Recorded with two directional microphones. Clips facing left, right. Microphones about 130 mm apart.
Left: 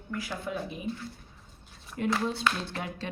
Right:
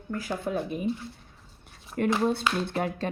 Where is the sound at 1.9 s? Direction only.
55° right (ahead or behind).